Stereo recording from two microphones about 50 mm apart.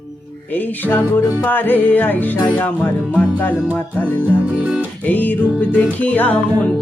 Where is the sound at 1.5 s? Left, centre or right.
Left.